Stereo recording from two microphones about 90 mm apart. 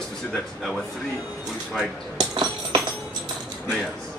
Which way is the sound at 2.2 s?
50° right (ahead or behind).